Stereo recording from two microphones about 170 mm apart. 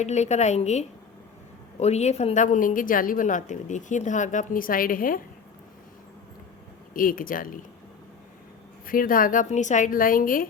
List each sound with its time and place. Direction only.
0.0 s a woman's voice: 40° left (ahead or behind)
6.9 s a woman's voice: 55° left (ahead or behind)
8.9 s a woman's voice: 55° left (ahead or behind)